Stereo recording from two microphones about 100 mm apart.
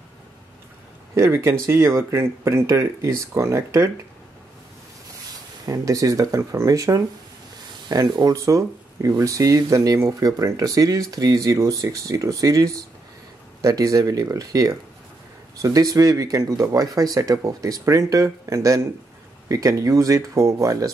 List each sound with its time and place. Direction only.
1.1 s speech: 30° right (ahead or behind)
5.7 s speech: 35° right (ahead or behind)